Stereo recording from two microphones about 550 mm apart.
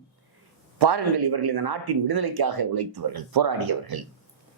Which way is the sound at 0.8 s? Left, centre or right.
Right.